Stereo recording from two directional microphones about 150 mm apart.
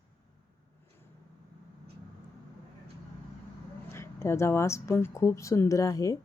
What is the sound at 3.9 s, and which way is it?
A woman's voice, 15° left (ahead or behind).